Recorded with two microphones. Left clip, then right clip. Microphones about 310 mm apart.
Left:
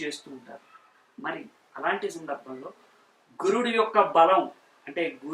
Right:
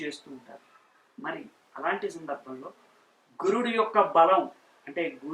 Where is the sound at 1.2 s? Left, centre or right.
Centre.